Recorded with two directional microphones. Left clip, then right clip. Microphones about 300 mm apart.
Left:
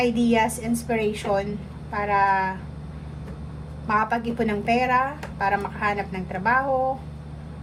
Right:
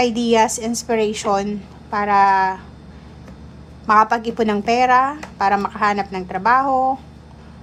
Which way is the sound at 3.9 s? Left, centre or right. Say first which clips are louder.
Right 8 dB; centre.